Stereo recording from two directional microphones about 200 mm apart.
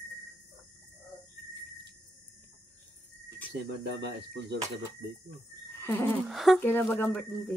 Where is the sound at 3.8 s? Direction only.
60° right (ahead or behind).